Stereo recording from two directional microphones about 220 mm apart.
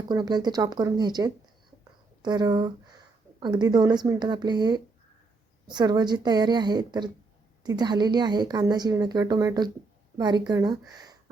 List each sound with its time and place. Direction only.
0.1 s a woman's voice: 20° right (ahead or behind)